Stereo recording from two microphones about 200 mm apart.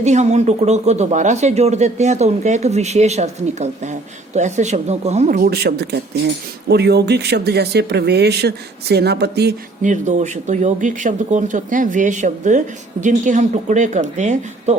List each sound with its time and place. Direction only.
0.0 s speech: 35° right (ahead or behind)
5.4 s speech: 50° right (ahead or behind)
9.8 s speech: 35° right (ahead or behind)